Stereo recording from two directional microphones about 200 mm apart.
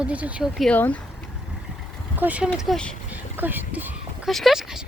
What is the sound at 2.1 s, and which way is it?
Speech, 5° right (ahead or behind).